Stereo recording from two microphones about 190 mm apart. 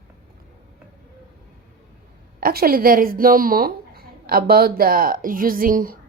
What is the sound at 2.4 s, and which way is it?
Speech, 50° right (ahead or behind).